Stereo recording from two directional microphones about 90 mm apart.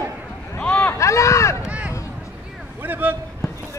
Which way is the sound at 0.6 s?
15° left (ahead or behind).